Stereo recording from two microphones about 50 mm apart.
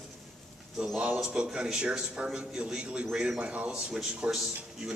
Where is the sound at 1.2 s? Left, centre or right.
Centre.